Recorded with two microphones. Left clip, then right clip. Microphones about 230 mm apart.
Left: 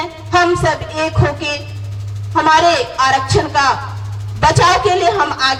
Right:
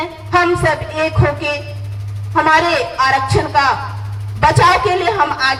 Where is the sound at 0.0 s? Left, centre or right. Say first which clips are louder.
Left 1 dB; left.